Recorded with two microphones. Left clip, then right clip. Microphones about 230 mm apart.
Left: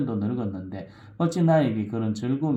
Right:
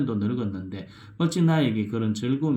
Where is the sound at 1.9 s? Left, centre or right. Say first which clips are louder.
Right 1 dB; right.